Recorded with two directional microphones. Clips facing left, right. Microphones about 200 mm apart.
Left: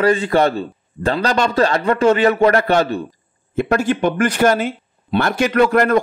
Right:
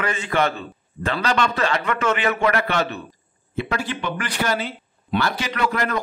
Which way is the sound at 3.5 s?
45° left (ahead or behind).